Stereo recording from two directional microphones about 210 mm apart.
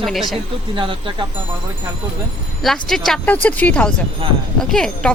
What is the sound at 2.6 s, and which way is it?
A woman's voice, centre (ahead or behind).